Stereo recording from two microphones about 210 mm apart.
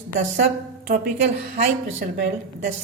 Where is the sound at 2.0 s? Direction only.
35° right (ahead or behind).